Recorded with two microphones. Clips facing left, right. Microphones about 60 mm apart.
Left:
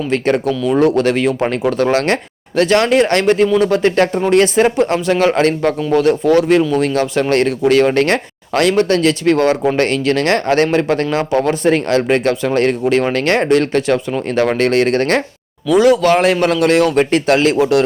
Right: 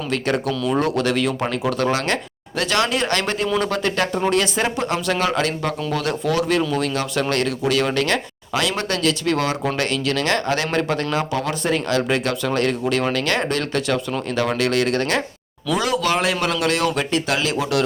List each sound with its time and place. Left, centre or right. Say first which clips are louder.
0.1 s speech: left 6 dB; left